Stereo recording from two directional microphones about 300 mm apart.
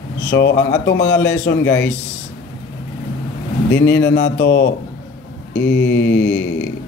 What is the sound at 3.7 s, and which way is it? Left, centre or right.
Mantra, left.